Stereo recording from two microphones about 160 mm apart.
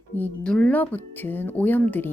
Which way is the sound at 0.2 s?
5° left (ahead or behind).